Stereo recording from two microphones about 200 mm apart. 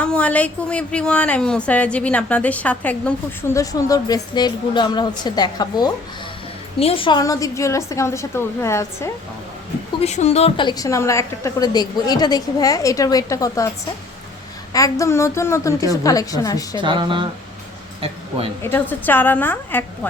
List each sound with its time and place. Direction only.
0.0 s speech: 5° left (ahead or behind)
3.6 s a woman's voice: 15° left (ahead or behind)
10.0 s a woman's voice: 35° left (ahead or behind); by 13.7 s 15° left (ahead or behind)
14.7 s speech: 15° left (ahead or behind)
16.7 s speech: 25° right (ahead or behind)
18.6 s speech: 10° left (ahead or behind)